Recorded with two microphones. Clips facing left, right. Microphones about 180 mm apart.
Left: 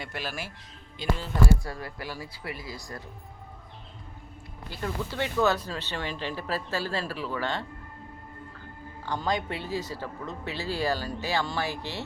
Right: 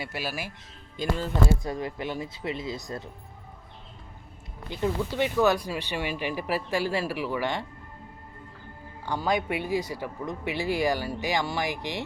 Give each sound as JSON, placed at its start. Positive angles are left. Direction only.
{"t": 0.0, "sound": "speech", "side_deg": -10}
{"t": 1.0, "sound": "speech", "side_deg": -45}
{"t": 1.6, "sound": "speech", "side_deg": -20}
{"t": 4.7, "sound": "speech", "side_deg": -15}
{"t": 9.0, "sound": "speech", "side_deg": -10}